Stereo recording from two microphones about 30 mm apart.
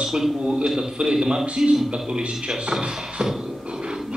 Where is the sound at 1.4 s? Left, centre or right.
Centre.